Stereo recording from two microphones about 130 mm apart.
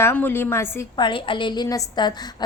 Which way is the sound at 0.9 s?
40° left (ahead or behind).